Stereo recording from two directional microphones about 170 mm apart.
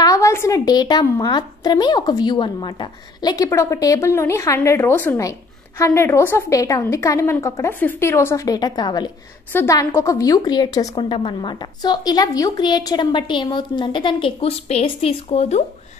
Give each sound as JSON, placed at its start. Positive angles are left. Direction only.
{"t": 0.0, "sound": "a woman's voice", "side_deg": 20}